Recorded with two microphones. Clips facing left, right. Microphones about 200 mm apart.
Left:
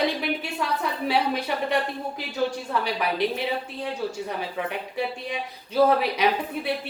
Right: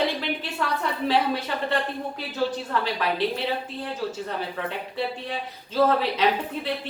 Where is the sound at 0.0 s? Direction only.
10° left (ahead or behind).